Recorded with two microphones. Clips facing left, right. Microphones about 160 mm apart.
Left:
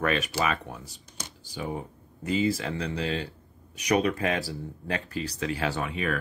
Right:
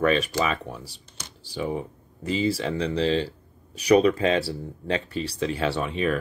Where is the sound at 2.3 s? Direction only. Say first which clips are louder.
Right 2 dB; 30° right (ahead or behind).